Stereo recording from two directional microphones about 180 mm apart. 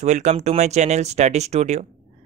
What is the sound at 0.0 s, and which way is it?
Speech, 40° right (ahead or behind).